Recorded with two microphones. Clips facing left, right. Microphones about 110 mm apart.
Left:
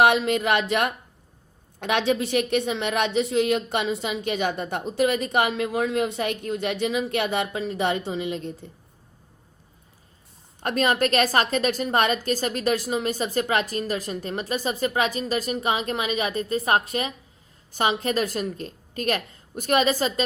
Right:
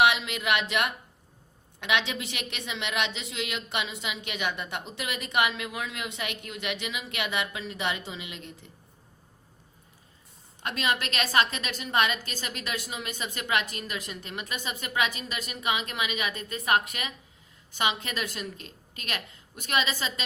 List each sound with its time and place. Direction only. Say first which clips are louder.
0.0 s a woman's voice: left 5 dB; 40° left (ahead or behind)
10.6 s a woman's voice: left 8 dB; 40° left (ahead or behind)